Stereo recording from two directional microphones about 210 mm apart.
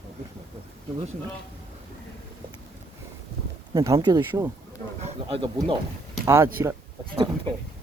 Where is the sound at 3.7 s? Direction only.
15° right (ahead or behind).